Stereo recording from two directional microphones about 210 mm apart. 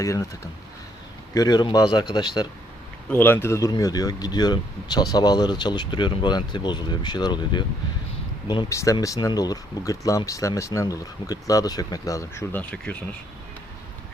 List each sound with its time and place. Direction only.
0.0 s speech: 15° left (ahead or behind)
1.3 s speech: 20° left (ahead or behind)
3.1 s speech: 10° left (ahead or behind)